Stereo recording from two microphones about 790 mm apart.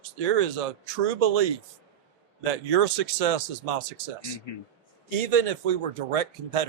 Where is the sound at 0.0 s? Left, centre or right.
Right.